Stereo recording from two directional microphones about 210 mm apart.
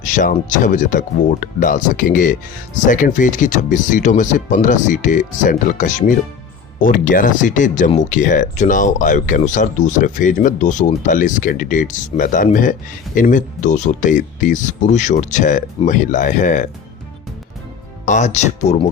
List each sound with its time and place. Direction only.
0.0 s speech: 35° left (ahead or behind)
18.0 s speech: 35° left (ahead or behind)